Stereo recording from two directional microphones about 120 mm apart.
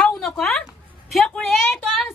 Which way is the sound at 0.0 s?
5° left (ahead or behind).